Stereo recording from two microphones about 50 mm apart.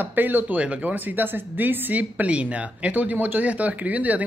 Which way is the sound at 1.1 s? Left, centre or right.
Right.